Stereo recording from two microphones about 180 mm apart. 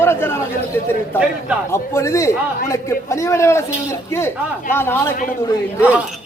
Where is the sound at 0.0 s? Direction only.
15° left (ahead or behind).